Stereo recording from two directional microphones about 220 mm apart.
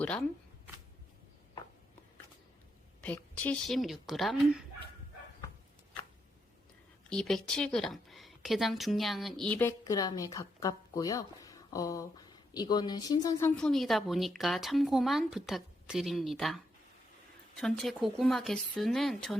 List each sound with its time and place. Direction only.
3.0 s speech: 5° left (ahead or behind)
7.1 s speech: 5° left (ahead or behind)
13.6 s speech: centre (ahead or behind)
17.6 s speech: centre (ahead or behind)